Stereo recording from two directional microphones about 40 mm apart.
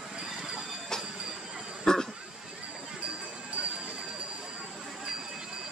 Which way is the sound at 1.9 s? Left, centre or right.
Centre.